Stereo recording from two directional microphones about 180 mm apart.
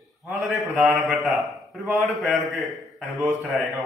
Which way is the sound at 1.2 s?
Centre (ahead or behind).